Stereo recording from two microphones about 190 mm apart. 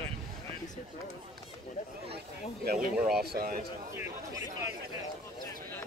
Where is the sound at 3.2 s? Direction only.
50° right (ahead or behind).